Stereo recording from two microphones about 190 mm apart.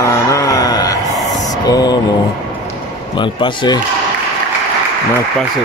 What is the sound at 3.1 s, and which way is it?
Speech, 25° left (ahead or behind).